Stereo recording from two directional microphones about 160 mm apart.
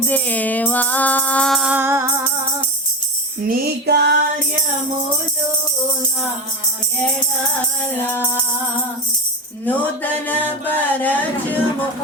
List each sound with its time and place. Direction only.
0.1 s music: 10° left (ahead or behind); by 2.2 s 20° right (ahead or behind)
3.5 s music: 80° right
8.1 s music: 15° left (ahead or behind)
9.6 s music: 10° left (ahead or behind)